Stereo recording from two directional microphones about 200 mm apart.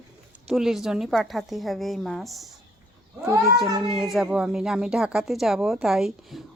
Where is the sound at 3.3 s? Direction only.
20° right (ahead or behind).